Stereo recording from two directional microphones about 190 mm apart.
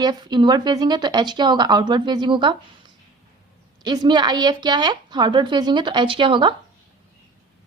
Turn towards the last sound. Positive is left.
turn(degrees=-25)  # may be behind; listen again after turning